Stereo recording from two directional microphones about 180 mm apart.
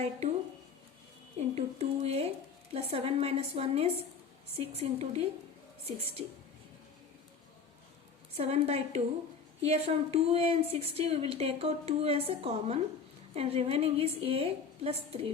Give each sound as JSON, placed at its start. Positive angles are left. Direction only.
{"t": 1.4, "sound": "a woman's voice", "side_deg": -35}
{"t": 8.4, "sound": "a woman's voice", "side_deg": -35}